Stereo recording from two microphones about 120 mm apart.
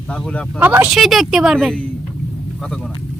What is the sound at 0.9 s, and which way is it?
Speech, centre (ahead or behind).